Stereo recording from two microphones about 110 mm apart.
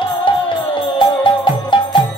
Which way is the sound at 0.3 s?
50° left (ahead or behind).